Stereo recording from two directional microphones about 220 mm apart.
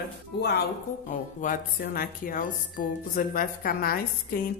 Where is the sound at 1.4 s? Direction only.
40° left (ahead or behind).